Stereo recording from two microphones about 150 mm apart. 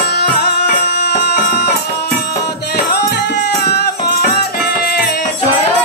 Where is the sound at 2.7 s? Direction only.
90° left.